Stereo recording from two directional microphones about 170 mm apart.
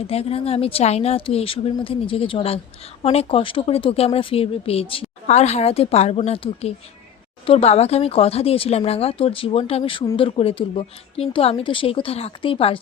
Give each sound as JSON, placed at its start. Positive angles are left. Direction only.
{"t": 0.1, "sound": "speech", "side_deg": 35}